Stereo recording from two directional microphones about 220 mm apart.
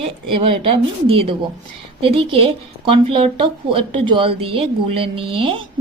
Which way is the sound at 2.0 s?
25° right (ahead or behind).